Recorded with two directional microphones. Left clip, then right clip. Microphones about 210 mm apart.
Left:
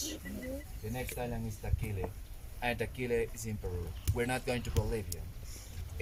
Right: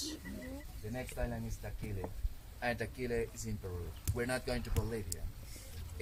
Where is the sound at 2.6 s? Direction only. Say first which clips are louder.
Left 2 dB; 5° left (ahead or behind).